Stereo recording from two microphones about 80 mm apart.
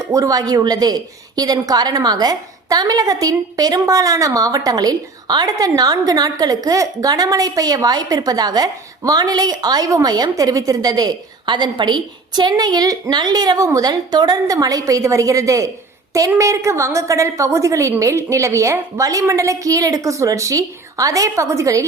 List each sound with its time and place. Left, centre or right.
0.0 s a woman's voice: right